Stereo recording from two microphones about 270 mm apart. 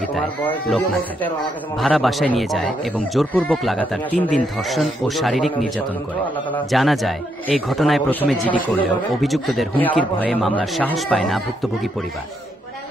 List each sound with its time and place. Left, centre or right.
0.1 s speech: centre
6.5 s speech: centre